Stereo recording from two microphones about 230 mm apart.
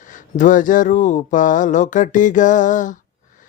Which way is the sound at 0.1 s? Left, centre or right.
Left.